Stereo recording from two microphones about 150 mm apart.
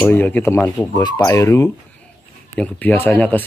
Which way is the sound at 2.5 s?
10° left (ahead or behind).